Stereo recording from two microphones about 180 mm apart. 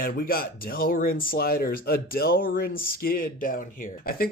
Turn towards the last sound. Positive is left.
turn(degrees=55)  # may be behind; listen again after turning